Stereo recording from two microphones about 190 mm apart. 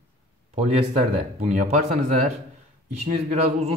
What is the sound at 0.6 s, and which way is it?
A man's voice, 35° right (ahead or behind).